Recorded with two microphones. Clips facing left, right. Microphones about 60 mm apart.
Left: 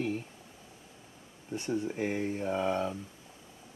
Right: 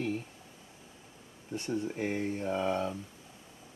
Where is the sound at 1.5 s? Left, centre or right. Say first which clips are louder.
Left 1 dB; centre.